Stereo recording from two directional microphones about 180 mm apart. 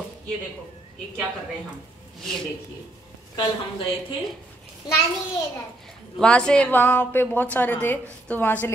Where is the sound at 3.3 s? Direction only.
30° left (ahead or behind).